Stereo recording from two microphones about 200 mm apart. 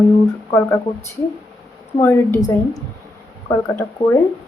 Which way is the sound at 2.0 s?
10° left (ahead or behind).